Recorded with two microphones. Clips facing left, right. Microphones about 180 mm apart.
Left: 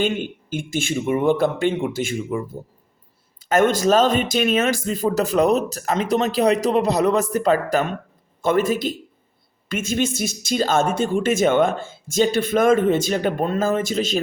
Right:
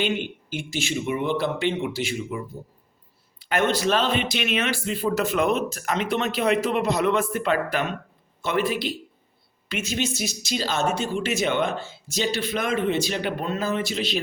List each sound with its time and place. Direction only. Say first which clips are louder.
0.0 s speech: left 3 dB; 50° left (ahead or behind)
3.5 s speech: left 6 dB; 45° left (ahead or behind)